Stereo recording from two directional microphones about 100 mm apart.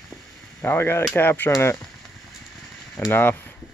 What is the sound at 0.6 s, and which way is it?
Speech, 20° left (ahead or behind).